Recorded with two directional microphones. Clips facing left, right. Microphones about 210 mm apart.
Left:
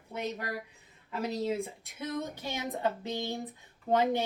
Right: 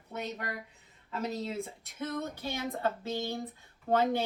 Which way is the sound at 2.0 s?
15° left (ahead or behind).